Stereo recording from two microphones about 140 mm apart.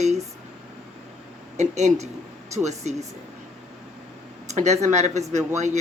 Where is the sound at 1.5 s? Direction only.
55° right (ahead or behind).